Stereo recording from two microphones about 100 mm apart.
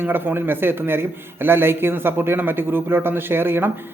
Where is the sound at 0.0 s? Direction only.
20° right (ahead or behind).